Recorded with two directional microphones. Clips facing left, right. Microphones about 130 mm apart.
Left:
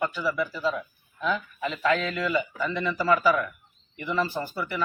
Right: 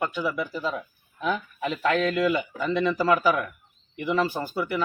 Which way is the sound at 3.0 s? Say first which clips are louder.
Left 2 dB; 15° right (ahead or behind).